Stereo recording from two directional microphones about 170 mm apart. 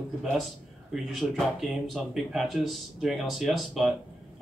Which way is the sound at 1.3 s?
Centre (ahead or behind).